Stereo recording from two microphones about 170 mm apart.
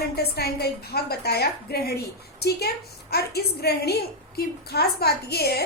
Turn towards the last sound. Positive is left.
turn(degrees=70)  # may be behind; listen again after turning